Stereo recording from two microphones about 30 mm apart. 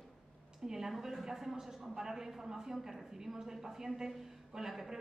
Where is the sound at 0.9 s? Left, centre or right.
Centre.